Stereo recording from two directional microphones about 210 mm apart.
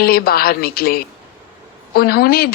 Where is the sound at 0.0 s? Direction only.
45° left (ahead or behind).